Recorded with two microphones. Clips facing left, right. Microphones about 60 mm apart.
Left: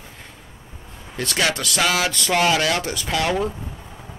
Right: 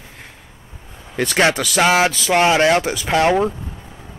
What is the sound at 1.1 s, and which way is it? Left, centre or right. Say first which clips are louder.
Speech: right 6 dB; right.